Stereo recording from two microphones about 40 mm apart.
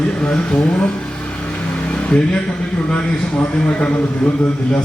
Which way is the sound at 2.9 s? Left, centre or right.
Left.